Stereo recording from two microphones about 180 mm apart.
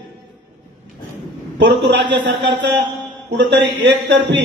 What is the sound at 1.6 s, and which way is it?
A man's voice, 75° right (ahead or behind).